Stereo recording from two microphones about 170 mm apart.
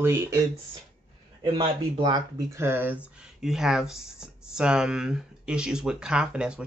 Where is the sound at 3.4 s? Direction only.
5° right (ahead or behind).